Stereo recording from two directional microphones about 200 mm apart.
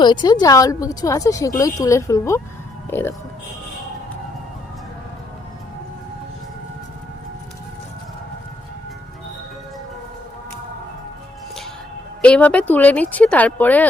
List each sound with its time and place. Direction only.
0.0 s speech: 20° left (ahead or behind)
12.2 s speech: 5° left (ahead or behind)